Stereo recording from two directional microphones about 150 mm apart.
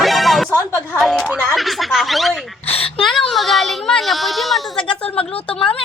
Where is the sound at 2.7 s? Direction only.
40° left (ahead or behind).